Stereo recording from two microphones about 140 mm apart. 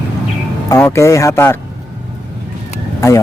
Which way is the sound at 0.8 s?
20° left (ahead or behind).